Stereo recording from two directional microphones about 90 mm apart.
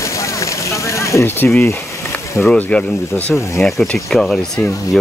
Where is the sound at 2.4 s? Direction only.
5° left (ahead or behind).